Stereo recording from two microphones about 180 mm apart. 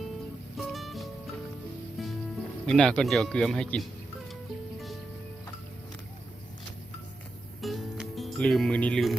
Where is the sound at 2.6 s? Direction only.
5° left (ahead or behind).